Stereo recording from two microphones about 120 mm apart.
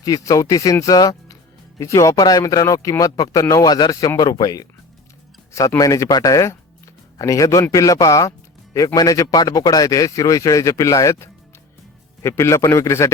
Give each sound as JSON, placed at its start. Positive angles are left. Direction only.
{"t": 0.0, "sound": "a man's voice", "side_deg": 30}